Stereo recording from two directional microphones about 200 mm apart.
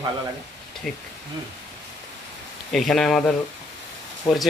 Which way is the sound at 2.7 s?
Centre (ahead or behind).